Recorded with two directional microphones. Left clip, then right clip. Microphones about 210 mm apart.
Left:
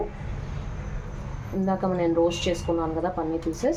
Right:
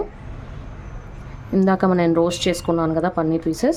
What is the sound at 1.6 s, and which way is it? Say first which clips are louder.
Speech: right 6 dB; 50° right (ahead or behind).